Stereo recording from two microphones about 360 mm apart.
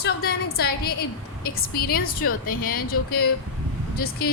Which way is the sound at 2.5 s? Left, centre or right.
Left.